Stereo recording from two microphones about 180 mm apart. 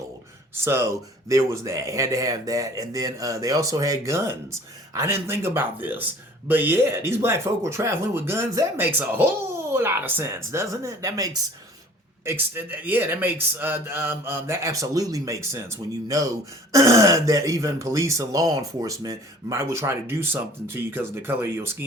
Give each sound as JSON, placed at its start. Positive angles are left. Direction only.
{"t": 0.5, "sound": "speech", "side_deg": -15}